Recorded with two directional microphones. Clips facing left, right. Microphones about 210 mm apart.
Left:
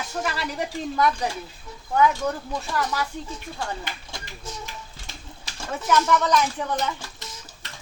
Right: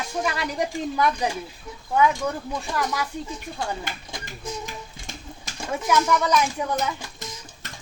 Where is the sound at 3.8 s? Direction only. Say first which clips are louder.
Right 2 dB; 45° right (ahead or behind).